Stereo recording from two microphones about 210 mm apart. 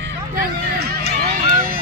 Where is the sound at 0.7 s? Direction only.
45° right (ahead or behind).